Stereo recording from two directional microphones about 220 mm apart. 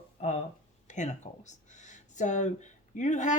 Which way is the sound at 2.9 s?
35° left (ahead or behind).